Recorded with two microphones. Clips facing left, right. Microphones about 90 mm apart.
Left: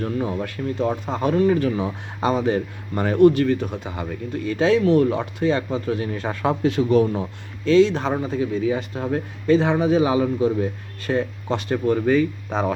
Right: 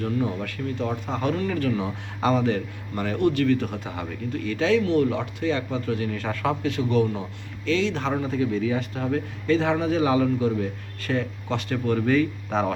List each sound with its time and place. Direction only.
0.3 s a man's voice: 25° left (ahead or behind)
1.0 s a man's voice: 15° left (ahead or behind)
1.4 s a man's voice: 30° left (ahead or behind)
2.5 s a man's voice: 40° left (ahead or behind)
3.3 s a man's voice: 25° left (ahead or behind)
3.7 s a man's voice: 10° left (ahead or behind)
4.4 s a man's voice: 30° left (ahead or behind)
8.0 s a man's voice: 10° left (ahead or behind)
8.7 s a man's voice: 20° left (ahead or behind)
9.8 s a man's voice: 10° left (ahead or behind)
12.5 s speech: 5° left (ahead or behind)